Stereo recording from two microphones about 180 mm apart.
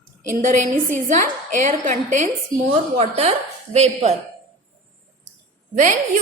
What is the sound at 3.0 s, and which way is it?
A woman's voice, 35° right (ahead or behind).